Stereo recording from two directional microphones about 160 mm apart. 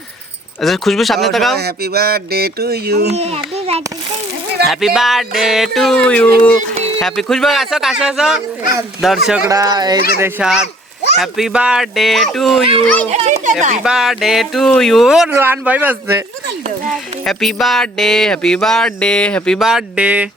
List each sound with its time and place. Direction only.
0.6 s speech: centre (ahead or behind)
1.5 s a sound: 80° right
3.2 s a child's voice: 40° right (ahead or behind)
4.6 s speech: centre (ahead or behind)
9.5 s speech: 25° right (ahead or behind)
10.2 s speech: 15° right (ahead or behind)
11.2 s a child's voice: centre (ahead or behind)
13.1 s speech: 45° right (ahead or behind)
13.8 s speech: centre (ahead or behind)
15.3 s speech: 15° right (ahead or behind)
16.9 s speech: centre (ahead or behind)